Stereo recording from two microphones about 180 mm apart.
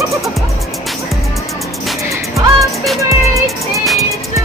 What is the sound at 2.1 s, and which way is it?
Music, 15° right (ahead or behind).